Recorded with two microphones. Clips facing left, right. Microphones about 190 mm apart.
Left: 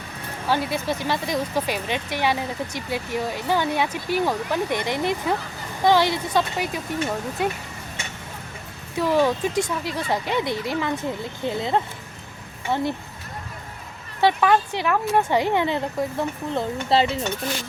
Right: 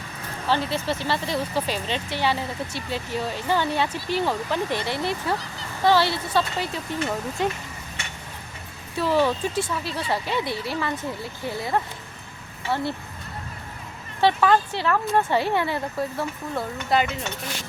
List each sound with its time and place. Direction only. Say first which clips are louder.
0.4 s speech: left 1 dB; 10° left (ahead or behind)
9.0 s speech: left 2 dB; 15° left (ahead or behind)
14.2 s speech: left 1 dB; 15° left (ahead or behind); by 17.2 s 30° left (ahead or behind)